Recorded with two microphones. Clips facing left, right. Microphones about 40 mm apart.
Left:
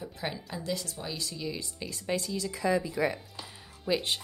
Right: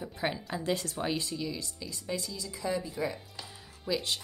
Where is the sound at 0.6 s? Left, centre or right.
Right.